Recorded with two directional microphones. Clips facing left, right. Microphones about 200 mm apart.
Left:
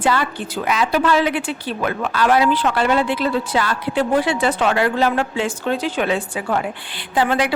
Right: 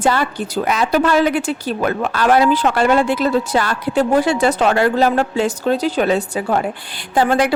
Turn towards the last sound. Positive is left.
turn(degrees=-45)  # may be behind; listen again after turning